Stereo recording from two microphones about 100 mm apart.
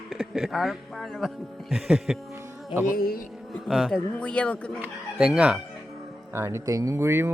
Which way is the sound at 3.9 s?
10° left (ahead or behind).